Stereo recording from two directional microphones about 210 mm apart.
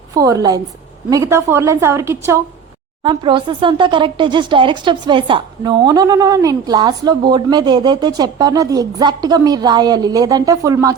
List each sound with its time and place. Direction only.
0.1 s a woman's voice: 15° right (ahead or behind)
3.0 s speech: 25° right (ahead or behind)